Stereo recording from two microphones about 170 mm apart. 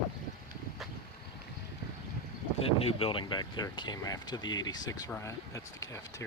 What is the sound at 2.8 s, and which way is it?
Speech, 35° left (ahead or behind).